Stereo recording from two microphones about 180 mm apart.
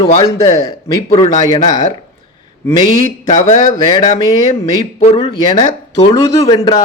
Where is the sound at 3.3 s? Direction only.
45° left (ahead or behind).